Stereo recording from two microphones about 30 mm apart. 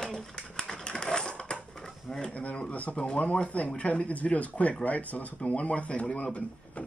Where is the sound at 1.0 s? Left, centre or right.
Left.